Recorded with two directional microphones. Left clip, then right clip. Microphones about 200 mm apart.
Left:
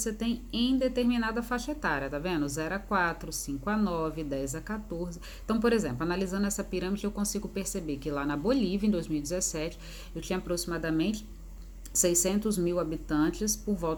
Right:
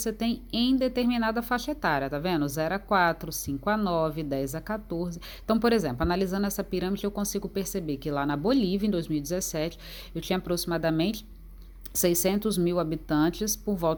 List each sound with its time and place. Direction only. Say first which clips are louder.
0.0 s a woman's voice: right 3 dB; 35° right (ahead or behind)